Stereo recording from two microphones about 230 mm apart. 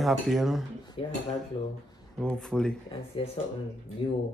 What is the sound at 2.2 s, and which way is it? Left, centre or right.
Speech, centre.